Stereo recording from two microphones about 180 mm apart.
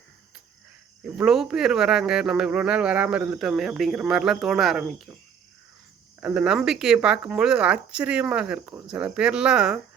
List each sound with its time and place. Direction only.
1.0 s speech: 5° right (ahead or behind)
6.1 s speech: 5° right (ahead or behind)